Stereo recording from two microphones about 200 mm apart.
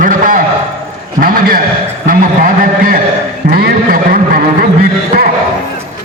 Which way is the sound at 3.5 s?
45° right (ahead or behind).